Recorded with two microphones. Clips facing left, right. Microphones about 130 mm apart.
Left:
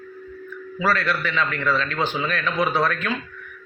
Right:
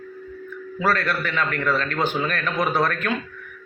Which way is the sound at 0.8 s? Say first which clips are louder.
Even; 45° right (ahead or behind).